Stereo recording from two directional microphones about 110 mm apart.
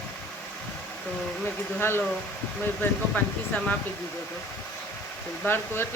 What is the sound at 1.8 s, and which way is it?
Speech, 20° left (ahead or behind).